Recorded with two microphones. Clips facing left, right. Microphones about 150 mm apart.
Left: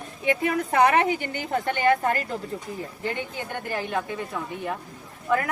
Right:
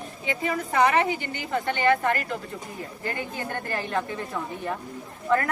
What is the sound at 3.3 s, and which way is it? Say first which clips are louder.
Speech: even; 10° left (ahead or behind).